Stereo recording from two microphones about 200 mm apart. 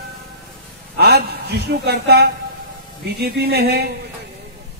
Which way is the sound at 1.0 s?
55° right (ahead or behind).